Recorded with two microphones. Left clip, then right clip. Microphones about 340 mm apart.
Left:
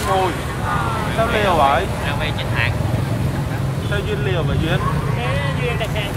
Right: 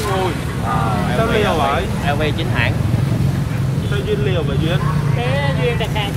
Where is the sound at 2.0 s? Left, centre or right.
Centre.